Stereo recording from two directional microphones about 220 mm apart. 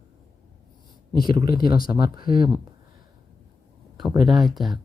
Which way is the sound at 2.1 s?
20° right (ahead or behind).